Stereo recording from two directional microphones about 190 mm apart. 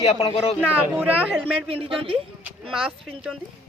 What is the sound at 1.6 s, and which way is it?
Speech, 30° right (ahead or behind).